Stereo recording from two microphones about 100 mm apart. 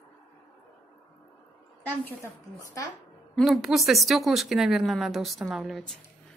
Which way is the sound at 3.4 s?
Centre (ahead or behind).